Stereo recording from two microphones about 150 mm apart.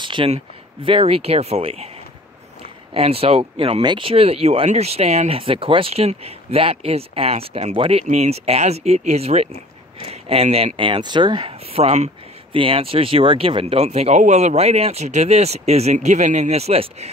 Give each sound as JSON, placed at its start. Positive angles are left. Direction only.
{"t": 0.0, "sound": "a sound", "side_deg": -35}
{"t": 0.8, "sound": "speech", "side_deg": -40}
{"t": 2.9, "sound": "speech", "side_deg": -40}